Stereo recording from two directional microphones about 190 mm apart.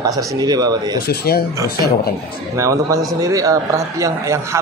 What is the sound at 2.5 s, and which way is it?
A man's voice, 15° right (ahead or behind).